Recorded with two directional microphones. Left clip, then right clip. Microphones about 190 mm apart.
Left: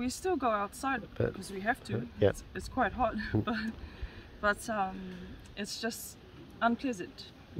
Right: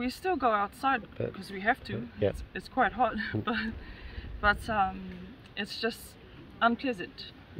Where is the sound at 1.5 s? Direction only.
5° left (ahead or behind).